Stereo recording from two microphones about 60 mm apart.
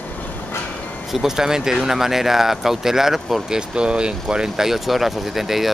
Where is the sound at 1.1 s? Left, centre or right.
Centre.